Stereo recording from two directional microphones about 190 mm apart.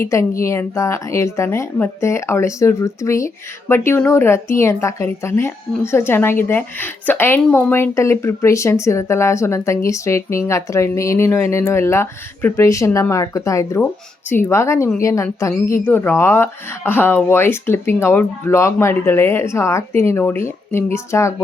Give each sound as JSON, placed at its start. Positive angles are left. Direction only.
{"t": 0.0, "sound": "a woman's voice", "side_deg": 15}